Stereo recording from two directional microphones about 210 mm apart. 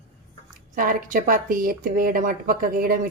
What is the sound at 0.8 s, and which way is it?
Speech, 40° right (ahead or behind).